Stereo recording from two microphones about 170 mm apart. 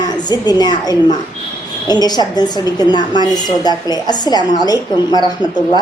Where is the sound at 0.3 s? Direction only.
25° left (ahead or behind).